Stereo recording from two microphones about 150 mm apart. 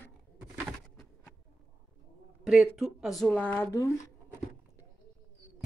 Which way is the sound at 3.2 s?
10° left (ahead or behind).